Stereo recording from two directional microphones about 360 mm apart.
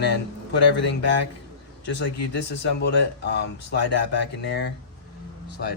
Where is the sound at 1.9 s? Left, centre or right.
Left.